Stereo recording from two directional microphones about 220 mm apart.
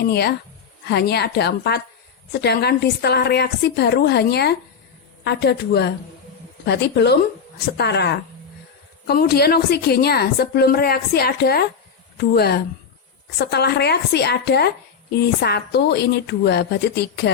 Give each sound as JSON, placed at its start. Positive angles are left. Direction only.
{"t": 0.0, "sound": "a woman's voice", "side_deg": 45}